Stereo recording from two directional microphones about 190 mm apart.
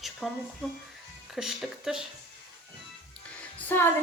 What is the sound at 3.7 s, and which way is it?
Speech, 10° left (ahead or behind).